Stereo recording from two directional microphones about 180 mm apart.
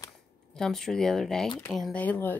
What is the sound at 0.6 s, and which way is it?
Speech, centre (ahead or behind).